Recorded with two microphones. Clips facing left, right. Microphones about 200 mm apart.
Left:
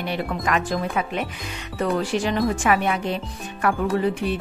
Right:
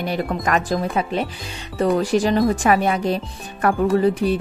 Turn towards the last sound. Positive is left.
turn(degrees=-40)  # may be behind; listen again after turning